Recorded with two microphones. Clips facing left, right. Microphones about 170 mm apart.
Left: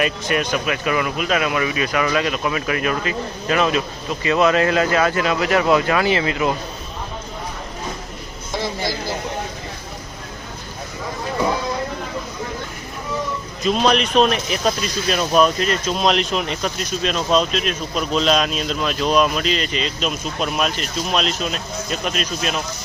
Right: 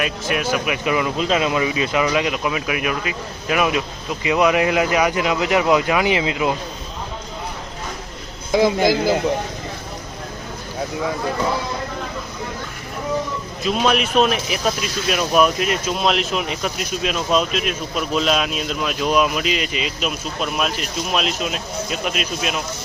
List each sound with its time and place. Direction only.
0.0 s speech: 5° right (ahead or behind)
0.6 s speech: 15° right (ahead or behind)
13.6 s speech: 5° right (ahead or behind)